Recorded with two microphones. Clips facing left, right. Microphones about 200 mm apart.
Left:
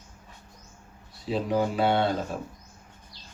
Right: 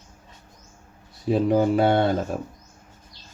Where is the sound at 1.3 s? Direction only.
50° right (ahead or behind).